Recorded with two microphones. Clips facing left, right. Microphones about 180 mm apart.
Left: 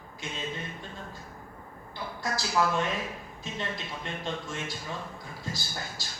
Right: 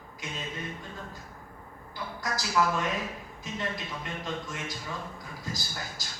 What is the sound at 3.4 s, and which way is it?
Speech, 30° left (ahead or behind).